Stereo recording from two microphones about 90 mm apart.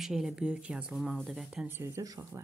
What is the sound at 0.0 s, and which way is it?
Speech, 5° right (ahead or behind).